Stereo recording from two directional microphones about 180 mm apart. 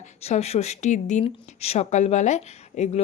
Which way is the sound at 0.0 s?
40° left (ahead or behind).